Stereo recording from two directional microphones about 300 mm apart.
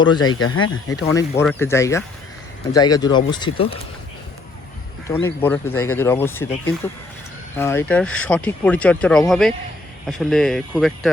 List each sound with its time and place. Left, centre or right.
0.3 s speech: left
0.9 s speech: centre
5.0 s speech: centre